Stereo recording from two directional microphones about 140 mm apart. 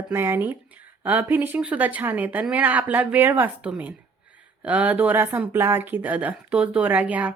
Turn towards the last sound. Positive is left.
turn(degrees=-10)  # may be behind; listen again after turning